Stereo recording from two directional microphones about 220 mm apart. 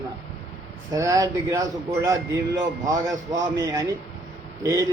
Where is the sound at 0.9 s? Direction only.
15° right (ahead or behind).